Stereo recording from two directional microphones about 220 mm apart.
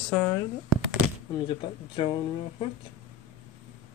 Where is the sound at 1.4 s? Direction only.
20° left (ahead or behind).